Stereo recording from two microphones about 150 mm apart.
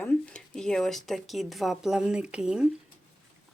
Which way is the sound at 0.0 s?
5° left (ahead or behind).